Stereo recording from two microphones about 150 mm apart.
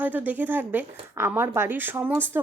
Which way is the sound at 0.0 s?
10° right (ahead or behind).